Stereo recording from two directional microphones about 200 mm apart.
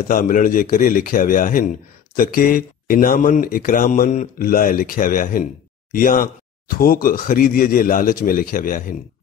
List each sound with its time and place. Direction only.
0.1 s speech: 45° left (ahead or behind)